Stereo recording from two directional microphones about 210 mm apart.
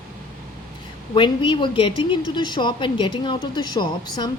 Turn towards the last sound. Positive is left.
turn(degrees=20)  # may be behind; listen again after turning